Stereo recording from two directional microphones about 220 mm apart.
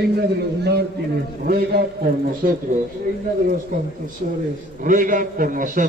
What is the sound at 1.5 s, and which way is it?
Speech, 45° right (ahead or behind).